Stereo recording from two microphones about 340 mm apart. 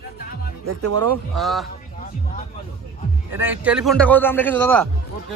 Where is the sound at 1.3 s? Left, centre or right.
Centre.